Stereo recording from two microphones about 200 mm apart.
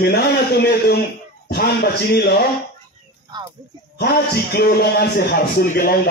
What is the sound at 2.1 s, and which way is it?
Speech, 55° left (ahead or behind).